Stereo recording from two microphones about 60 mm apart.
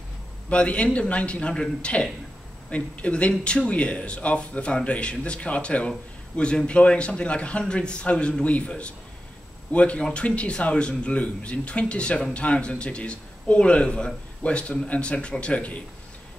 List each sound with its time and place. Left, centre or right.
0.5 s speech: left